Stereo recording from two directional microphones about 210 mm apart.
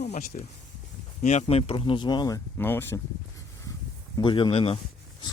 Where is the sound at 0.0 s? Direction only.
35° left (ahead or behind).